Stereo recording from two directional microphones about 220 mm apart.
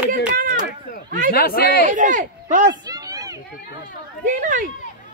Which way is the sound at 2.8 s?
15° right (ahead or behind).